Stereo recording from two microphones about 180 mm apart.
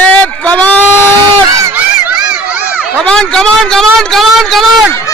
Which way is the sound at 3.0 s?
5° left (ahead or behind).